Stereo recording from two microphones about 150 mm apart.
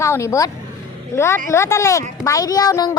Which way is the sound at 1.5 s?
20° left (ahead or behind).